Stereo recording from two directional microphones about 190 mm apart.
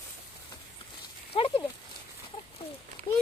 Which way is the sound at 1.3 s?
30° left (ahead or behind).